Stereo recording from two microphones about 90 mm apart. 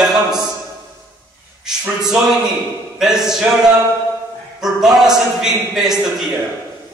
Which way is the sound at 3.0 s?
5° right (ahead or behind).